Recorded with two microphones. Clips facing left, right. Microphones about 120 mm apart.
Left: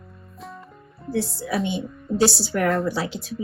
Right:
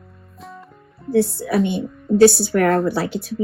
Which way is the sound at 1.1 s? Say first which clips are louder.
Right 7 dB; 60° right (ahead or behind).